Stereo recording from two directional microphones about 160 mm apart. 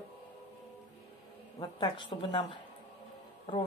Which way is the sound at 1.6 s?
30° left (ahead or behind).